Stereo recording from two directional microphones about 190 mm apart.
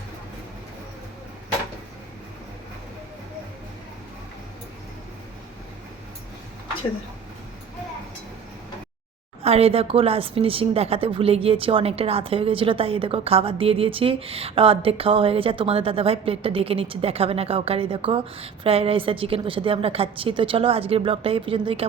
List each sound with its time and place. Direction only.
9.4 s speech: 30° right (ahead or behind)